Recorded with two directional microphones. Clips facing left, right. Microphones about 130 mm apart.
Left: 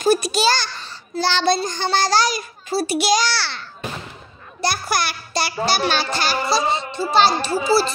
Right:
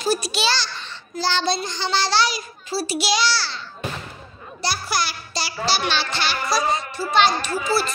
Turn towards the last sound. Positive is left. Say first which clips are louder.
# left 4 dB
turn(degrees=30)  # may be behind; listen again after turning